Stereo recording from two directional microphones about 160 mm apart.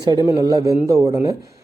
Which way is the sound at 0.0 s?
25° right (ahead or behind).